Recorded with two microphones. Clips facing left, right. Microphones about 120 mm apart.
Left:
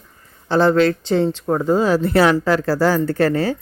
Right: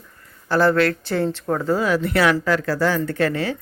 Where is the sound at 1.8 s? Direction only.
30° left (ahead or behind).